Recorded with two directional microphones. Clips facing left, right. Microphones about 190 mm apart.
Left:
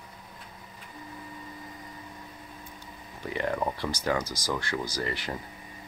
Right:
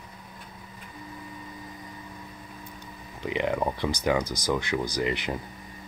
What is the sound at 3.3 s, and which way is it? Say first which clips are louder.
Speech: right 3 dB; 15° right (ahead or behind).